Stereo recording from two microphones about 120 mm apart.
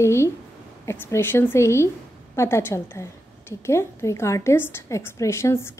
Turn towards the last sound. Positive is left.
turn(degrees=20)  # may be behind; listen again after turning